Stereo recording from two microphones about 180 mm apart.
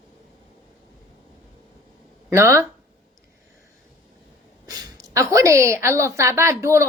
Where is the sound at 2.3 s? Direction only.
15° right (ahead or behind).